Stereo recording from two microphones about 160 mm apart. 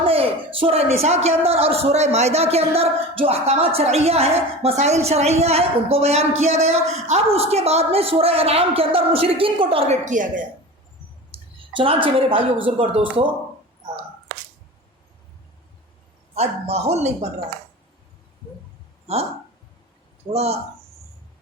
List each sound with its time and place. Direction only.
0.0 s a sound: 35° right (ahead or behind)
1.5 s a woman's voice: 40° right (ahead or behind)
11.3 s a sound: 35° right (ahead or behind)
12.0 s a woman's voice: 35° right (ahead or behind)
16.3 s a woman's voice: 40° right (ahead or behind)
20.3 s a woman's voice: 40° right (ahead or behind)